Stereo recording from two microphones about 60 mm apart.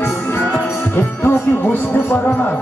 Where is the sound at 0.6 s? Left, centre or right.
Left.